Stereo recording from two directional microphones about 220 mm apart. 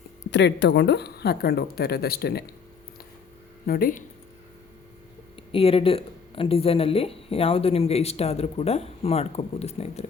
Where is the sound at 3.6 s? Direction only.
40° left (ahead or behind).